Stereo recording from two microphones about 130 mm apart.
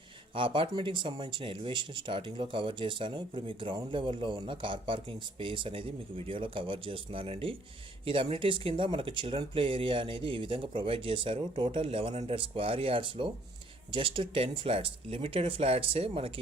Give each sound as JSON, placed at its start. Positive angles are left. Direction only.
{"t": 0.3, "sound": "speech", "side_deg": -40}